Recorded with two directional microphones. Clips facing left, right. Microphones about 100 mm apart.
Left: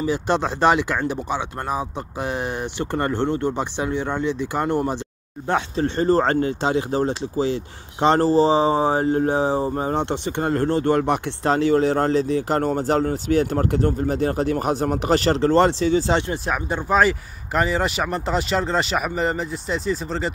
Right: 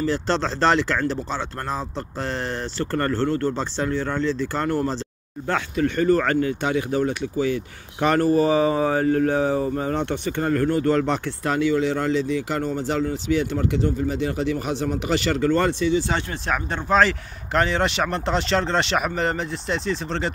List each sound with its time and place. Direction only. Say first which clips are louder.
0.0 s speech: left 1 dB; 15° left (ahead or behind)
5.5 s speech: left 1 dB; 30° left (ahead or behind)
11.0 s speech: left 2 dB; 20° left (ahead or behind)
11.4 s speech: left 3 dB; 30° left (ahead or behind)
11.7 s speech: left 3 dB; 45° left (ahead or behind)
16.1 s speech: left 5 dB; 20° left (ahead or behind)
16.4 s speech: left 1 dB; 10° left (ahead or behind)